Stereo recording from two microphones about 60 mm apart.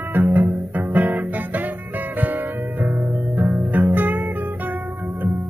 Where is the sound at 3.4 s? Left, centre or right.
Right.